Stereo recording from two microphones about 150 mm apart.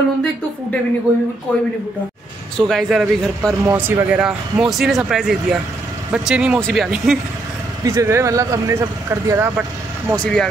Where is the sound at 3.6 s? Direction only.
15° right (ahead or behind).